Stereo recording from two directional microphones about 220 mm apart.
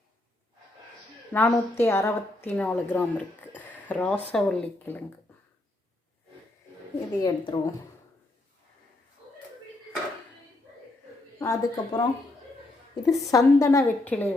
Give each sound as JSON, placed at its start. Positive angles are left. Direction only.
{"t": 1.3, "sound": "a woman's voice", "side_deg": 10}
{"t": 7.2, "sound": "speech", "side_deg": 20}
{"t": 11.3, "sound": "a woman's voice", "side_deg": 15}
{"t": 13.1, "sound": "a woman's voice", "side_deg": 15}